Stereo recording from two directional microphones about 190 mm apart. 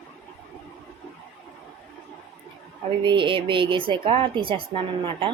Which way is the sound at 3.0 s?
25° right (ahead or behind).